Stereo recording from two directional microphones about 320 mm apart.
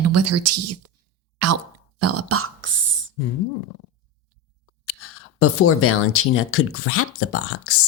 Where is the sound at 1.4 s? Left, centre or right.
Right.